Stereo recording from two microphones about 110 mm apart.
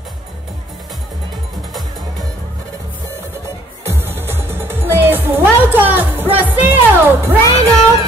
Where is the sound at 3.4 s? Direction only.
20° right (ahead or behind).